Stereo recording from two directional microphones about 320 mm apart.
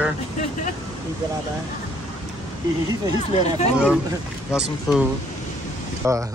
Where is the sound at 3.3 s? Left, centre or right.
Centre.